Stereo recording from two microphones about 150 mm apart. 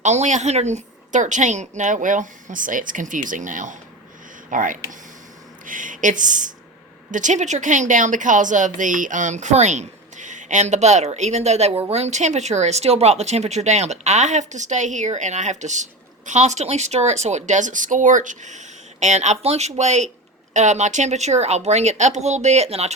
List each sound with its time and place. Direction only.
0.0 s a woman's voice: 50° right (ahead or behind)